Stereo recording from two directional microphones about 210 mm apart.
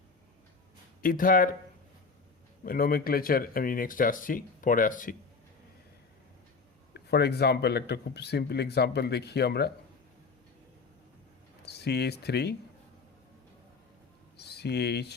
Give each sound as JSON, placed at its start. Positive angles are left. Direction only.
{"t": 1.0, "sound": "speech", "side_deg": 40}
{"t": 2.6, "sound": "speech", "side_deg": 45}
{"t": 6.9, "sound": "speech", "side_deg": 50}
{"t": 11.6, "sound": "speech", "side_deg": 50}
{"t": 14.3, "sound": "speech", "side_deg": 50}